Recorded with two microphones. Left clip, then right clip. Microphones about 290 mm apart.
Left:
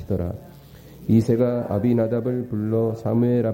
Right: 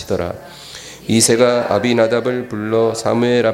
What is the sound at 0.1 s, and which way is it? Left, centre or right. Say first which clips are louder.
Speech: right 8 dB; centre.